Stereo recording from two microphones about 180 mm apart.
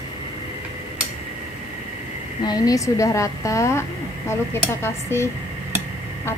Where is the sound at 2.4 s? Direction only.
20° left (ahead or behind).